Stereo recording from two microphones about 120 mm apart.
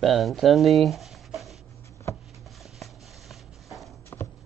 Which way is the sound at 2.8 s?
Centre (ahead or behind).